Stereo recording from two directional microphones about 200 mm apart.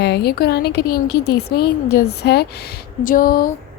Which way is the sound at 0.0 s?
55° left (ahead or behind).